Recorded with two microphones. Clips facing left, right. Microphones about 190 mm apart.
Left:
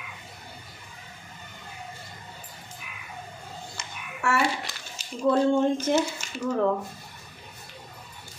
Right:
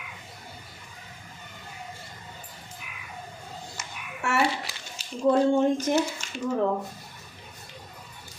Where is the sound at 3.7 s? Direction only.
20° right (ahead or behind).